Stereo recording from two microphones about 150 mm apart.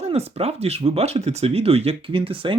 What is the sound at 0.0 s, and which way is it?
Speech, 45° right (ahead or behind).